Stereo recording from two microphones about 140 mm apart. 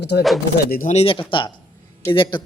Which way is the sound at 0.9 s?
40° left (ahead or behind).